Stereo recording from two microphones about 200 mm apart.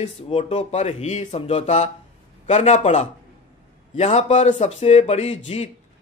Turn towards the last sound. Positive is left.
turn(degrees=30)  # may be behind; listen again after turning